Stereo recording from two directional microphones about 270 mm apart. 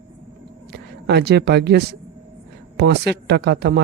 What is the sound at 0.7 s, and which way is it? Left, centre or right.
Speech, right.